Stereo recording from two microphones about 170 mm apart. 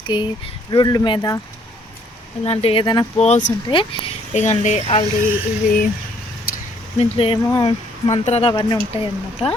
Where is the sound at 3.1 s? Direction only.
40° left (ahead or behind).